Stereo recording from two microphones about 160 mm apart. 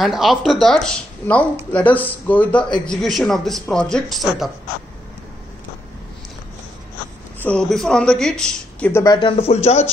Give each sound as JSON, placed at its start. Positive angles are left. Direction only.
{"t": 0.0, "sound": "a man's voice", "side_deg": 0}
{"t": 7.4, "sound": "speech", "side_deg": 5}
{"t": 9.0, "sound": "speech", "side_deg": 25}
{"t": 9.4, "sound": "speech", "side_deg": 40}